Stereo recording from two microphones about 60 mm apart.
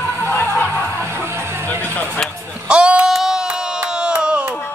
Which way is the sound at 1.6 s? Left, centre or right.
Left.